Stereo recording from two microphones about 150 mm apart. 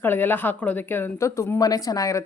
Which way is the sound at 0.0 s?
15° left (ahead or behind).